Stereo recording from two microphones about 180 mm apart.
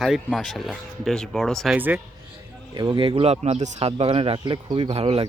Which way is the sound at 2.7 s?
25° right (ahead or behind).